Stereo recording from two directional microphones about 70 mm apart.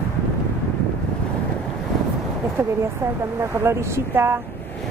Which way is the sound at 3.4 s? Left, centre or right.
Right.